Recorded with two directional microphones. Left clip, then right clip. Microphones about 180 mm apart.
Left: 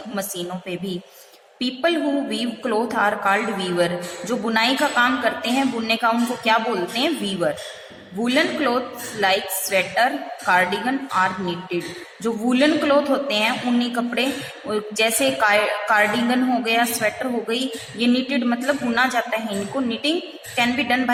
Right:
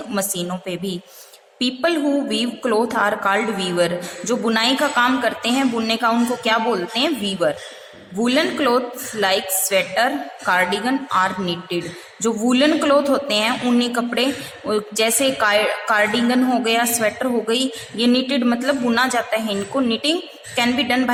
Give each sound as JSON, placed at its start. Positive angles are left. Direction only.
{"t": 0.1, "sound": "a woman's voice", "side_deg": -25}